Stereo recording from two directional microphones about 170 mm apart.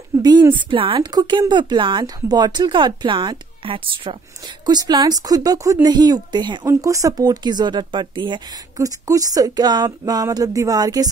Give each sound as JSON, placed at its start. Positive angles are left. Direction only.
{"t": 0.2, "sound": "speech", "side_deg": -25}